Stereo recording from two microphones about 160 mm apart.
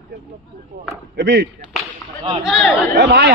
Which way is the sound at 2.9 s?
90° right.